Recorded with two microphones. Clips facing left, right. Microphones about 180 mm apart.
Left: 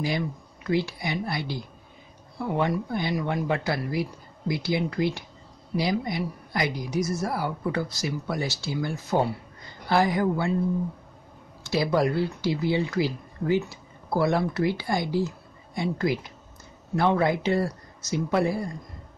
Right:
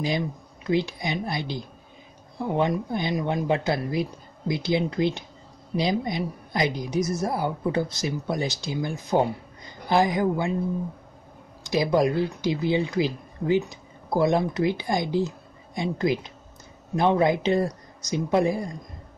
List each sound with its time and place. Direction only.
0.0 s a woman's voice: 20° right (ahead or behind)
11.6 s a woman's voice: 15° right (ahead or behind)